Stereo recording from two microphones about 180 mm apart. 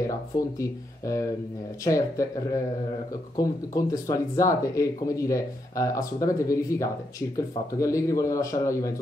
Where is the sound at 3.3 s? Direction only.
20° left (ahead or behind).